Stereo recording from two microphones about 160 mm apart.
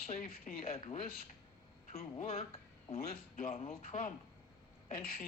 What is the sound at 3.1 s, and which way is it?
Speech, 65° left (ahead or behind).